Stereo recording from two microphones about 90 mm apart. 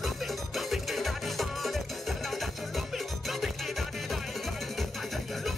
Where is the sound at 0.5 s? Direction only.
Centre (ahead or behind).